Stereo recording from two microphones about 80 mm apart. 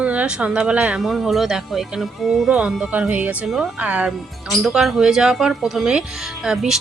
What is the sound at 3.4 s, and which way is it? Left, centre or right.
Speech, centre.